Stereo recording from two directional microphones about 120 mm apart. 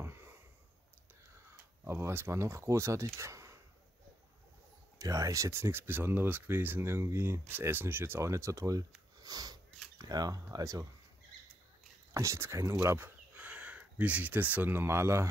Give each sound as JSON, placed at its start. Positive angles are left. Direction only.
{"t": 0.0, "sound": "sniff", "side_deg": -20}
{"t": 1.9, "sound": "speech", "side_deg": -20}
{"t": 3.2, "sound": "a sound", "side_deg": -25}
{"t": 4.9, "sound": "speech", "side_deg": -30}
{"t": 9.2, "sound": "sniff", "side_deg": -35}
{"t": 9.9, "sound": "speech", "side_deg": -35}
{"t": 12.1, "sound": "speech", "side_deg": -25}